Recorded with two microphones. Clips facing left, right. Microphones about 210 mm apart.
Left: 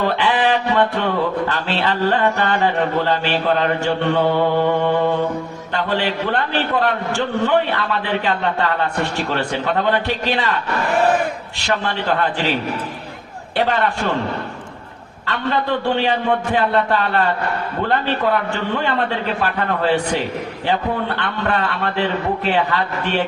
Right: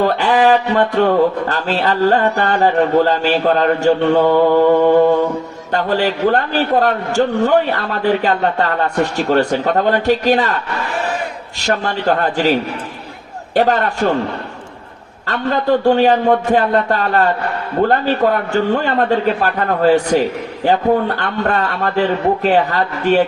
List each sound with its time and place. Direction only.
0.0 s a man's voice: 45° right (ahead or behind)
11.6 s a man's voice: 45° right (ahead or behind)
15.3 s a man's voice: 45° right (ahead or behind)